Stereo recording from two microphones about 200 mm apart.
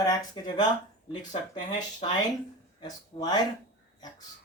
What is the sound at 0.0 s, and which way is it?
Speech, 20° left (ahead or behind).